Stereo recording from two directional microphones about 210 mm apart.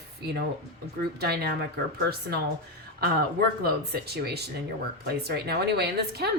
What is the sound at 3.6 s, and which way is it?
A woman's voice, 50° right (ahead or behind).